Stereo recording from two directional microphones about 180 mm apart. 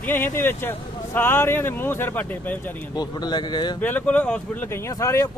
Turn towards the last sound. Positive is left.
turn(degrees=15)  # may be behind; listen again after turning